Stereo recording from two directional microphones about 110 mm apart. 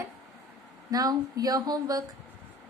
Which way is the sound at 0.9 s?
35° right (ahead or behind).